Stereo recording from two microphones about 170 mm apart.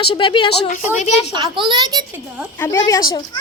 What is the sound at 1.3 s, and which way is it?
Speech, 25° right (ahead or behind).